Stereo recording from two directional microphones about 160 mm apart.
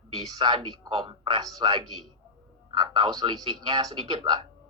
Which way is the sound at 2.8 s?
30° right (ahead or behind).